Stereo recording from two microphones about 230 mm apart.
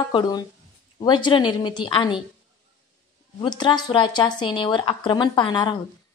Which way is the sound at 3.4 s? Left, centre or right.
Centre.